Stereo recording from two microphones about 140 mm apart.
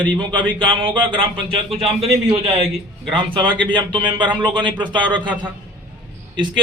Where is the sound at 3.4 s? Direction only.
10° left (ahead or behind).